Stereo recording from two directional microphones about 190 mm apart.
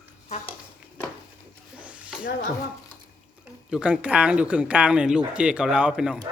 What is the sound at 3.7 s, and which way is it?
Speech, 5° right (ahead or behind).